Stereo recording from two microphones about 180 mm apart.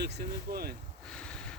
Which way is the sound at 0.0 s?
65° right (ahead or behind).